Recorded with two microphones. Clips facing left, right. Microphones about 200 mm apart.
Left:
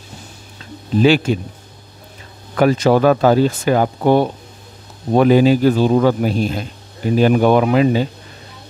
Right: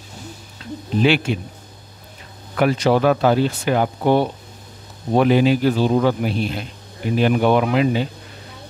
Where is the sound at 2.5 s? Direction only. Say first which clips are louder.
Left 4 dB; 45° left (ahead or behind).